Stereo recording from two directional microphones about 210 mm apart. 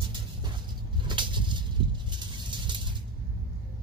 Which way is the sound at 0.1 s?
20° right (ahead or behind).